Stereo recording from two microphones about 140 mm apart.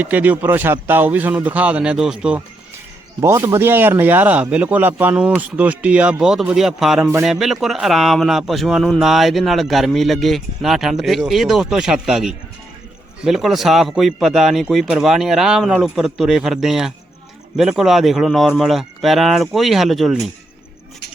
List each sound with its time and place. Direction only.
0.0 s speech: 10° right (ahead or behind)
3.2 s speech: 20° right (ahead or behind); by 7.0 s centre (ahead or behind)
7.0 s a man's voice: 20° right (ahead or behind)
7.3 s a man's voice: centre (ahead or behind)